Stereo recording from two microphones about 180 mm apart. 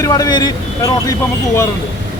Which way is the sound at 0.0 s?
20° left (ahead or behind).